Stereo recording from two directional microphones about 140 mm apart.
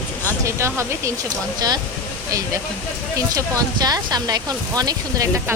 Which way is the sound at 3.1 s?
25° right (ahead or behind).